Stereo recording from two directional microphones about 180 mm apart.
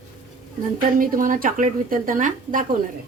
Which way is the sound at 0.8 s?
50° right (ahead or behind).